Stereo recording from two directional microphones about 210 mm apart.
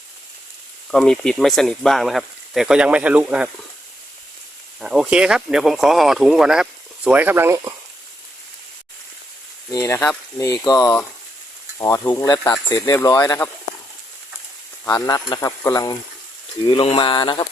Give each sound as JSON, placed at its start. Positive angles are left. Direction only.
{"t": 0.9, "sound": "speech", "side_deg": 0}
{"t": 4.8, "sound": "speech", "side_deg": -5}
{"t": 9.7, "sound": "speech", "side_deg": 15}
{"t": 14.8, "sound": "speech", "side_deg": 15}
{"t": 16.6, "sound": "a sound", "side_deg": 25}